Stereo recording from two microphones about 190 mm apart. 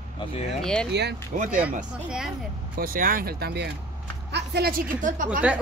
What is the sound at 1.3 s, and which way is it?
Speech, 40° right (ahead or behind).